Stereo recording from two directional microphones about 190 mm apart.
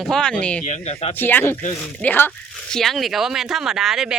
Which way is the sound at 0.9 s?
35° left (ahead or behind).